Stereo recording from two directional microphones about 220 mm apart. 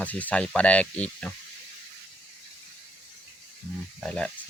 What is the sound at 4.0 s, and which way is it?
Speech, 5° left (ahead or behind).